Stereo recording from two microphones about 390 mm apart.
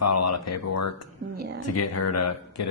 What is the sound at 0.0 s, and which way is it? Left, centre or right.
Speech, left.